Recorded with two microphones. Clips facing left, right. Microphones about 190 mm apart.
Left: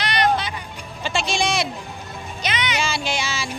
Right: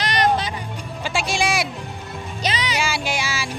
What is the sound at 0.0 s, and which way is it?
Music, 40° right (ahead or behind).